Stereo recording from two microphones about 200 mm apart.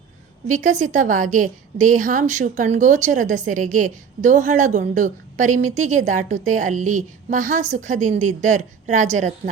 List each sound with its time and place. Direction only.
0.4 s a woman's voice: 40° right (ahead or behind)